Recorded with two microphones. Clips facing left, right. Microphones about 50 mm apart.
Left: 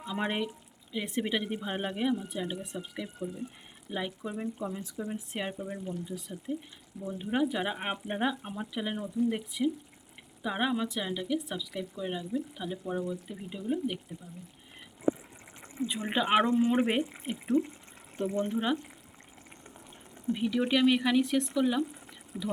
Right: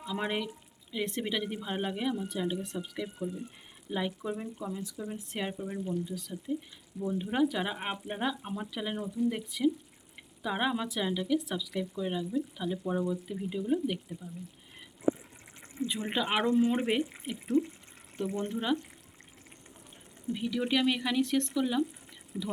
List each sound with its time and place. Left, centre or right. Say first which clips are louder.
0.0 s speech: left 1 dB; centre
6.1 s speech: even; left
7.1 s speech: right 1 dB; centre
12.8 s speech: right 2 dB; centre
15.9 s speech: right 2 dB; centre
16.1 s speech: left 2 dB; centre
20.3 s speech: left 2 dB; centre